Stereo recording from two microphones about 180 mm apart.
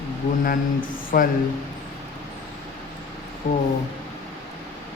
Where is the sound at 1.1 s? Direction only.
50° left (ahead or behind).